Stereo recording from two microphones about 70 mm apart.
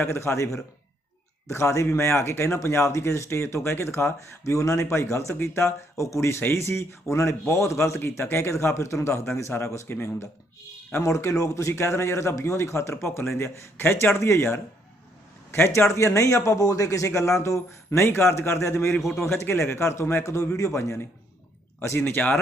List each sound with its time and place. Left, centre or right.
0.1 s speech: left